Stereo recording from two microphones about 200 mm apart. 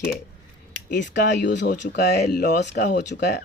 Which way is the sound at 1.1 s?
60° left (ahead or behind).